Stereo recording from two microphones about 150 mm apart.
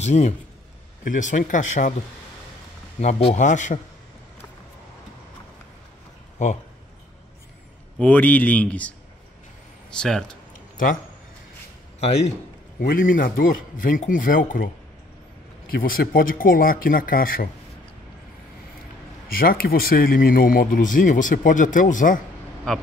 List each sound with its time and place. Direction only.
0.0 s speech: 50° left (ahead or behind)
3.0 s speech: 50° left (ahead or behind)
6.3 s speech: 55° left (ahead or behind)
8.0 s a man's voice: 10° left (ahead or behind)
12.0 s a man's voice: 45° left (ahead or behind)
12.8 s speech: 65° left (ahead or behind)
15.7 s speech: 75° left (ahead or behind)
19.2 s speech: 75° left (ahead or behind)
22.7 s speech: 5° left (ahead or behind)